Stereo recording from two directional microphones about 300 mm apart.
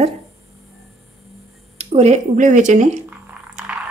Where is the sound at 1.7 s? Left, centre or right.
Right.